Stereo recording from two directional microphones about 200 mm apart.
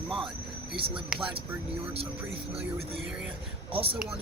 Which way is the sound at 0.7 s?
25° right (ahead or behind).